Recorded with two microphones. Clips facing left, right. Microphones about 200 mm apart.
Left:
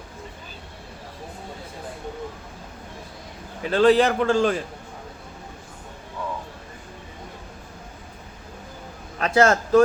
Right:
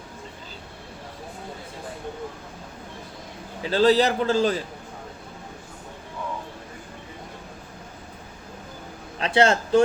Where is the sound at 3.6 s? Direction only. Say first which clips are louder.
Left 2 dB; 35° right (ahead or behind).